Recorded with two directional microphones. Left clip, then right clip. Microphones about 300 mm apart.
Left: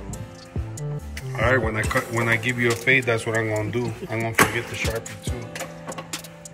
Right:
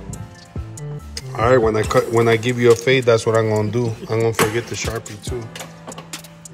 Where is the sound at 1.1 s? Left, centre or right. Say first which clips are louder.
Right 6 dB; centre.